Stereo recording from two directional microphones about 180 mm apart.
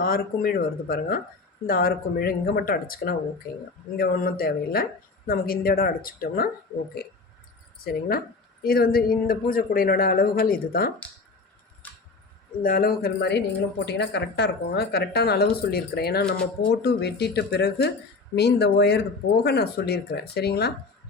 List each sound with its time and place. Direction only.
0.0 s speech: 55° left (ahead or behind)
7.9 s speech: 55° left (ahead or behind)
11.8 s a sound: 10° left (ahead or behind)
12.6 s speech: 55° left (ahead or behind)